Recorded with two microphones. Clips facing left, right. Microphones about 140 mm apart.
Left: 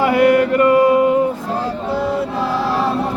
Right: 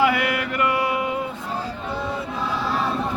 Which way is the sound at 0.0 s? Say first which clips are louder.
Left 9 dB; 45° left (ahead or behind).